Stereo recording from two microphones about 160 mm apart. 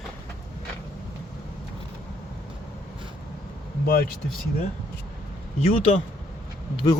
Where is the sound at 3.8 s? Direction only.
70° left (ahead or behind).